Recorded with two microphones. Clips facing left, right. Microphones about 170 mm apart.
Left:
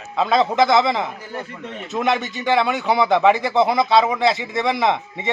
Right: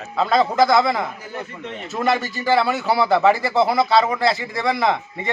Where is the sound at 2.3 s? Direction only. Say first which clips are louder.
Even; 20° left (ahead or behind).